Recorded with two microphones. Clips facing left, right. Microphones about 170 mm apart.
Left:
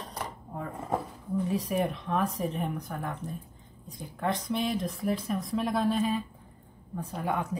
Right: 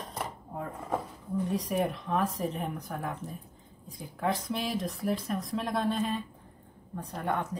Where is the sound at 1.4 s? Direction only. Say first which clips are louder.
Even; centre (ahead or behind).